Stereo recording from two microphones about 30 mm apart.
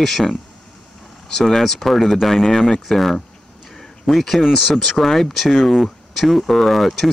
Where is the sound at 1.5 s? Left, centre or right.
Centre.